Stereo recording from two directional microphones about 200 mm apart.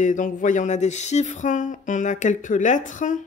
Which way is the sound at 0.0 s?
40° left (ahead or behind).